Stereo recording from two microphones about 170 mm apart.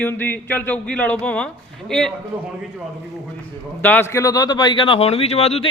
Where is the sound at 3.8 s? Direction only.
10° left (ahead or behind); by 5.7 s 35° left (ahead or behind).